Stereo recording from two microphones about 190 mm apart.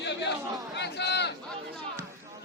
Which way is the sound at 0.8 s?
65° left (ahead or behind).